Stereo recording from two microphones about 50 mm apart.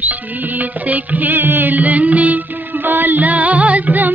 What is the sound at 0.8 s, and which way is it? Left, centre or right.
Music, right.